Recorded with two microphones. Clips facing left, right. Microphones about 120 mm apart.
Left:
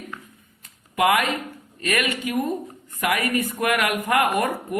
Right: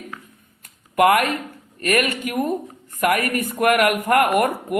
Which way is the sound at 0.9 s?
50° right (ahead or behind).